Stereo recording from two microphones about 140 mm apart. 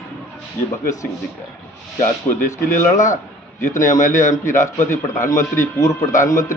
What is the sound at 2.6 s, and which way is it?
A man's voice, 65° left (ahead or behind).